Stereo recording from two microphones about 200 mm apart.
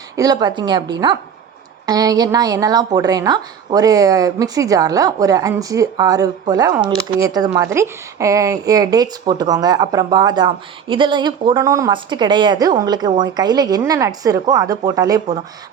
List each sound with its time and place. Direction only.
0.2 s speech: 20° right (ahead or behind)